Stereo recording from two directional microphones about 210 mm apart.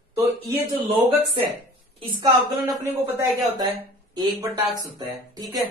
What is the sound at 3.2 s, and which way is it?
Speech, 15° right (ahead or behind).